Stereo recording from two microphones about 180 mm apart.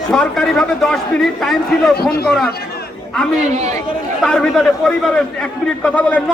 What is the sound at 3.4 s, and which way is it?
Speech, 40° right (ahead or behind).